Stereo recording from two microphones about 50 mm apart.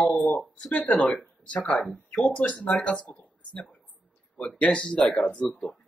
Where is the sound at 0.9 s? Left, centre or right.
Left.